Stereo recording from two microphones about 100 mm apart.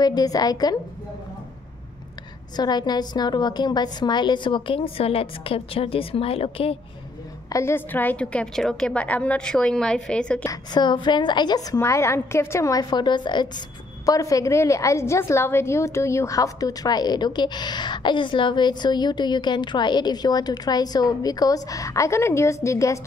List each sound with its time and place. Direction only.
0.0 s a woman's voice: 40° left (ahead or behind)
2.5 s a woman's voice: 45° left (ahead or behind); by 6.8 s 75° left (ahead or behind)
7.4 s a woman's voice: 30° left (ahead or behind); by 10.4 s 10° left (ahead or behind)
10.4 s a woman's voice: 40° left (ahead or behind)
12.9 s a woman's voice: 50° left (ahead or behind)
14.0 s a woman's voice: 35° left (ahead or behind)